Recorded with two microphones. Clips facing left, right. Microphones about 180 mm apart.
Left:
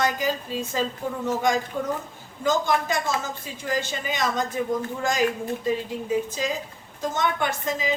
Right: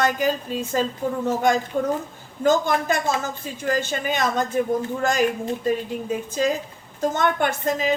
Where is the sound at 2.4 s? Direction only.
50° right (ahead or behind).